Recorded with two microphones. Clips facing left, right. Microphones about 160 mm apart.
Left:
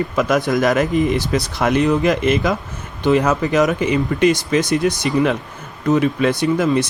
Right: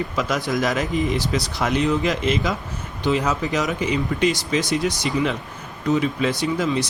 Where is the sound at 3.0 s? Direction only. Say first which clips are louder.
Left 6 dB; 70° left (ahead or behind); by 4.7 s 55° left (ahead or behind).